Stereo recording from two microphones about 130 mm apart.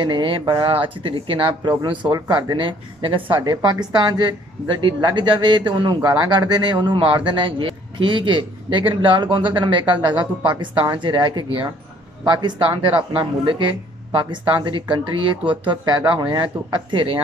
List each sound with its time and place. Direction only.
0.0 s speech: 40° right (ahead or behind)